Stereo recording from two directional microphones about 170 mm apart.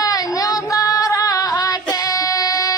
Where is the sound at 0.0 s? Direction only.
20° left (ahead or behind).